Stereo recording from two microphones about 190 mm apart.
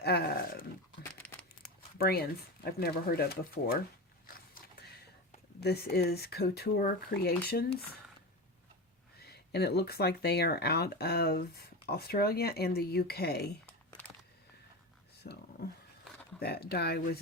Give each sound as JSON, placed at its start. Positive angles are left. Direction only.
{"t": 0.0, "sound": "speech", "side_deg": 55}
{"t": 1.2, "sound": "crumpling", "side_deg": 10}
{"t": 2.0, "sound": "speech", "side_deg": 55}
{"t": 5.5, "sound": "speech", "side_deg": 55}
{"t": 9.1, "sound": "speech", "side_deg": 55}
{"t": 15.2, "sound": "a sound", "side_deg": 60}
{"t": 16.4, "sound": "speech", "side_deg": 55}